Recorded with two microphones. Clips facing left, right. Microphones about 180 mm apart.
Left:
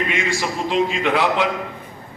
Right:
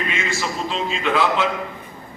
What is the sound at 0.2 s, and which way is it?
A man's voice, 15° left (ahead or behind).